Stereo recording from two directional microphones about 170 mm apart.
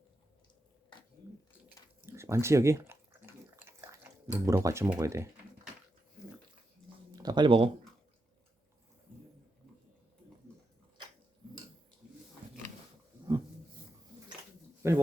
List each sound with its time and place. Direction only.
2.0 s chewing: 15° right (ahead or behind)
7.1 s speech: 25° right (ahead or behind)
14.8 s speech: 15° right (ahead or behind)